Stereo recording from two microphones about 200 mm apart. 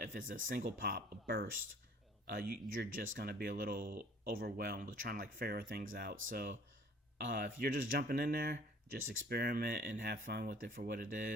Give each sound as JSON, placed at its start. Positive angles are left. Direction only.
{"t": 0.3, "sound": "speech", "side_deg": -45}